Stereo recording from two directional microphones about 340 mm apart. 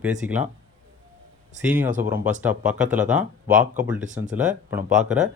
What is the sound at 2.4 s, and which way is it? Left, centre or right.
Speech, centre.